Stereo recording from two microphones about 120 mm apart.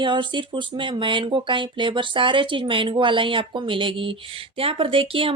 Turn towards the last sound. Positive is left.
turn(degrees=-50)  # may be behind; listen again after turning